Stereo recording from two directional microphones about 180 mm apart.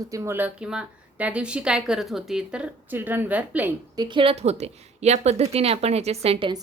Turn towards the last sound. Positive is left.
turn(degrees=-35)  # may be behind; listen again after turning